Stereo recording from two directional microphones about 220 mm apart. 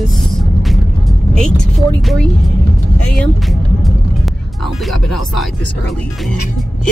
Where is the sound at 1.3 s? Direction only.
5° left (ahead or behind).